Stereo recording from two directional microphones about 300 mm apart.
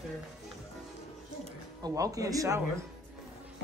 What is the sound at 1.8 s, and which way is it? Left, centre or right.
Speech, centre.